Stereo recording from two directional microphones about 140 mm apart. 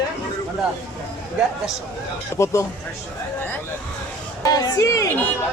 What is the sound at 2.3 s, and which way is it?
Speech, 20° left (ahead or behind).